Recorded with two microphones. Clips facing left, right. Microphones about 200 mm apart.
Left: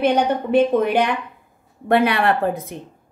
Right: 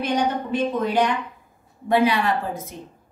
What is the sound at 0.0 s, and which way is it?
Speech, 60° left (ahead or behind).